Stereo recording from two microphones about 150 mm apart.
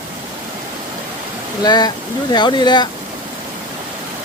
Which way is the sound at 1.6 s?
25° left (ahead or behind).